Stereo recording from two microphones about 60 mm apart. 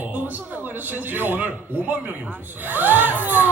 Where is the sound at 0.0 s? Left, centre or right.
Right.